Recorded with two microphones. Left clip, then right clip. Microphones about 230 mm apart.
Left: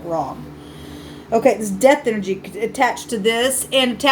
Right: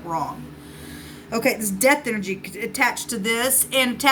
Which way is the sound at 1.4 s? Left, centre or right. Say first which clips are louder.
Left 6 dB; right.